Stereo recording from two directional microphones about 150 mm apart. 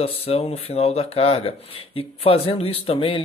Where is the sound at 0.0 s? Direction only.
40° left (ahead or behind).